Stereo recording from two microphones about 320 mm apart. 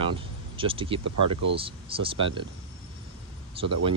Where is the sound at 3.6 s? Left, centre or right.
Centre.